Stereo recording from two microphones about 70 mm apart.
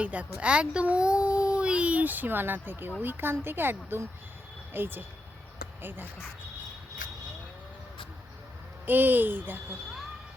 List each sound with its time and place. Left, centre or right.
0.0 s a child's voice: centre
8.9 s a child's voice: right